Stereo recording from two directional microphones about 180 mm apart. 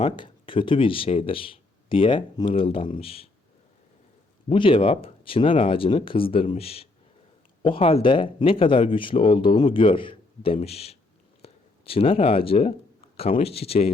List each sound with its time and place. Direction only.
0.0 s speech: 30° left (ahead or behind)
4.4 s speech: 30° left (ahead or behind)